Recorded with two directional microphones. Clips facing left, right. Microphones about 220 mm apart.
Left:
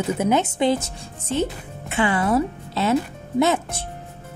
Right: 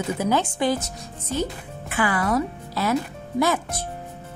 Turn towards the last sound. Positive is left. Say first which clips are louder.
# left 3 dB
turn(degrees=25)  # may be behind; listen again after turning